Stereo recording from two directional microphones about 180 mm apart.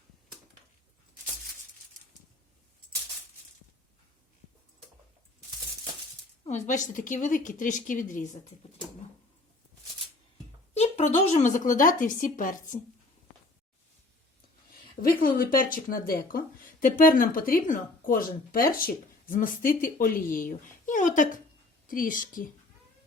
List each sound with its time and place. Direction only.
6.4 s speech: 40° left (ahead or behind)
10.8 s speech: 40° left (ahead or behind)
15.0 s speech: 50° left (ahead or behind)